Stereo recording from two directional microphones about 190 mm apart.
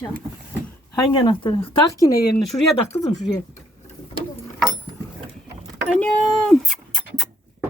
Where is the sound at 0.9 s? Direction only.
25° left (ahead or behind).